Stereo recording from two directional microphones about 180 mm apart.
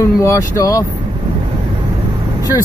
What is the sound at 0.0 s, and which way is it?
Speech, 15° left (ahead or behind).